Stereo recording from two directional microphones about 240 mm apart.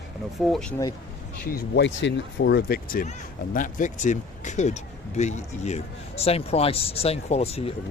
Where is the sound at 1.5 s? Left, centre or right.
Left.